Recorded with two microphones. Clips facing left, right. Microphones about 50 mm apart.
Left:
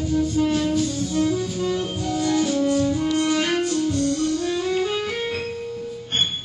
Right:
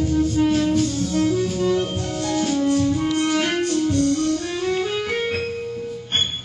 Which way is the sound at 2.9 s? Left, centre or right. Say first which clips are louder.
Even; centre.